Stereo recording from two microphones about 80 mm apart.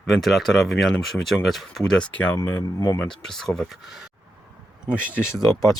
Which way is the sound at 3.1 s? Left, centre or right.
Centre.